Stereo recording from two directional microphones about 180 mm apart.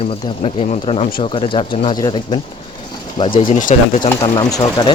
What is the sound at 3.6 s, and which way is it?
Speech, 45° left (ahead or behind).